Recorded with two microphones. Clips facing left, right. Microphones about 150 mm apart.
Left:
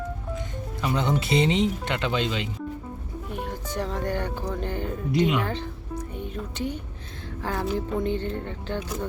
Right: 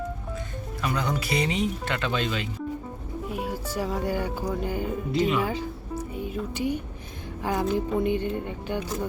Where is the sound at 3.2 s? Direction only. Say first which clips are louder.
Right 2 dB; 5° right (ahead or behind).